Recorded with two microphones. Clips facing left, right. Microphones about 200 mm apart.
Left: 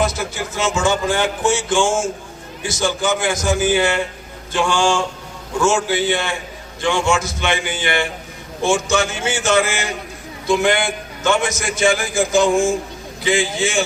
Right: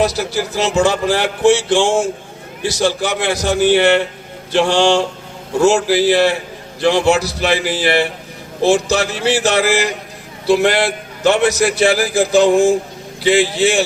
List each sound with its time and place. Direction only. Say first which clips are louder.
0.0 s speech: right 4 dB; 35° right (ahead or behind)
13.6 s speech: right 5 dB; 35° right (ahead or behind)